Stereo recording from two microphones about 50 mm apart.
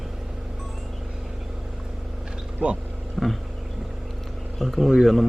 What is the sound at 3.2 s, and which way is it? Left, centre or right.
Vehicle, centre.